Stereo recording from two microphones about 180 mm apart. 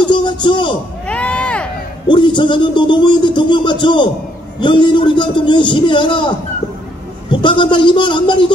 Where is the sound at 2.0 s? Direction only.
25° left (ahead or behind).